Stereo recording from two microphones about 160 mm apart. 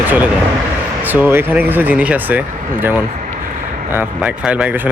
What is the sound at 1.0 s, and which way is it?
Speech, 10° right (ahead or behind).